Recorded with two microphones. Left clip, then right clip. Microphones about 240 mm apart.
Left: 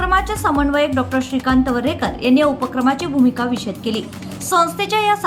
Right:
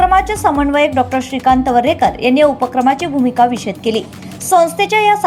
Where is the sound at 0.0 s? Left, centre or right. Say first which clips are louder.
Right 6 dB; centre.